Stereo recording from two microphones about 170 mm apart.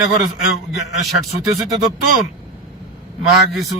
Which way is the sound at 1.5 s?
Centre (ahead or behind).